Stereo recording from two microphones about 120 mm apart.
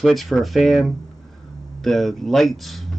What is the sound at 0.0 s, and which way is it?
Speech, centre (ahead or behind).